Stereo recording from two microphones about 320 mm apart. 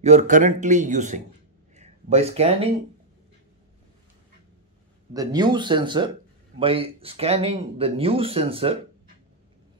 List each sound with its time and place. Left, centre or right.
0.0 s speech: right
5.1 s speech: centre